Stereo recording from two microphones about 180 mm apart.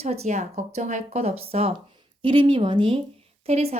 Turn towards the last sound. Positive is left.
turn(degrees=-35)  # may be behind; listen again after turning